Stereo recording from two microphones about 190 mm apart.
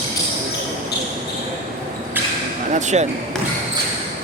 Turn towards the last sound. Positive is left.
turn(degrees=-40)  # may be behind; listen again after turning